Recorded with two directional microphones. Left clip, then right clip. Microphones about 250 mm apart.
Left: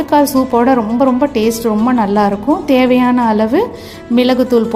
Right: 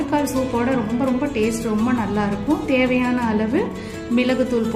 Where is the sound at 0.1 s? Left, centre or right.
Left.